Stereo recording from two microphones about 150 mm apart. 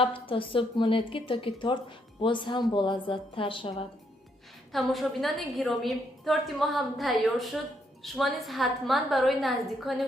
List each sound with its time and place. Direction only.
0.0 s a woman's voice: 35° left (ahead or behind)
4.7 s a woman's voice: centre (ahead or behind)